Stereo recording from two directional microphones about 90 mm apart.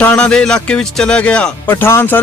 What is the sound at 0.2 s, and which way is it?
Speech, 10° left (ahead or behind).